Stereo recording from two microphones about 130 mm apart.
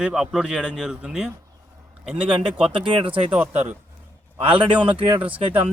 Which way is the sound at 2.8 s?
40° right (ahead or behind).